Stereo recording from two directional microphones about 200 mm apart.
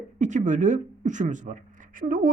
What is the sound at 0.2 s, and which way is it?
Speech, 35° right (ahead or behind).